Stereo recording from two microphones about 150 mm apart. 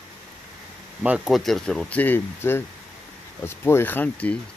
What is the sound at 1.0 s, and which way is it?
Speech, 5° right (ahead or behind).